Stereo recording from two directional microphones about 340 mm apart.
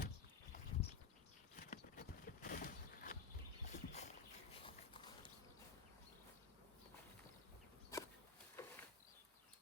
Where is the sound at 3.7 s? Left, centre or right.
Centre.